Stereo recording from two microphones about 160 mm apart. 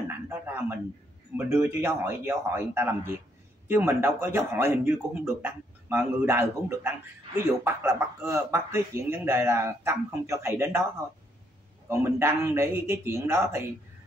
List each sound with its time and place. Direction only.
0.3 s a sound: 10° right (ahead or behind)
1.3 s a man's voice: 15° right (ahead or behind)
11.9 s a man's voice: 15° right (ahead or behind)